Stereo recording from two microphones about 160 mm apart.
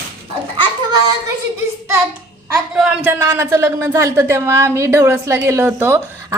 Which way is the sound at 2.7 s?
5° right (ahead or behind).